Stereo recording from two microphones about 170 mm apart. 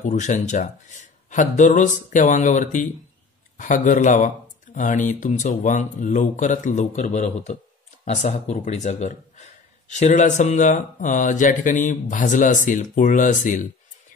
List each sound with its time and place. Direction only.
0.0 s speech: 45° left (ahead or behind)